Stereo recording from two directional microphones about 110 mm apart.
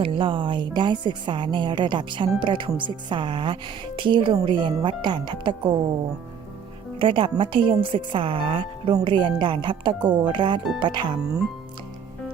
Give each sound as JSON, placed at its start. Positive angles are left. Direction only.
{"t": 0.0, "sound": "a woman's voice", "side_deg": -50}
{"t": 7.0, "sound": "a woman's voice", "side_deg": -50}
{"t": 9.0, "sound": "a woman's voice", "side_deg": -45}